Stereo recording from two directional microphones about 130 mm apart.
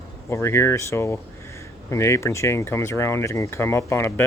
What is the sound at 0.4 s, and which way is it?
Speech, 20° left (ahead or behind).